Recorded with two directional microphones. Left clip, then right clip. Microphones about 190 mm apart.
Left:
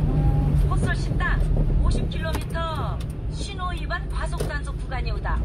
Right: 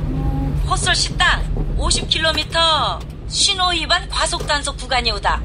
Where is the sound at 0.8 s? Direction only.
60° right (ahead or behind).